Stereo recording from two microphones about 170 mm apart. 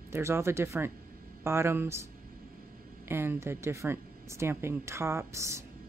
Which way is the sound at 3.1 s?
15° right (ahead or behind).